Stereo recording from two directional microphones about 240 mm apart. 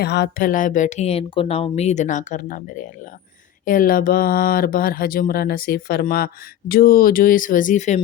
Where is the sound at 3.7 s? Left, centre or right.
Left.